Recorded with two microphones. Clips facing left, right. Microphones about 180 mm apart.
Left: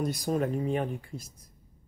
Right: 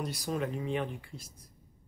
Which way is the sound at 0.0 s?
45° left (ahead or behind).